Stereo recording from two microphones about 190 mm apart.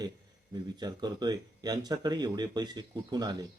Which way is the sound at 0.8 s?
20° right (ahead or behind).